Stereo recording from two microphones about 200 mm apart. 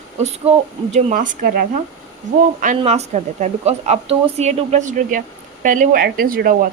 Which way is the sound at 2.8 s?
30° right (ahead or behind).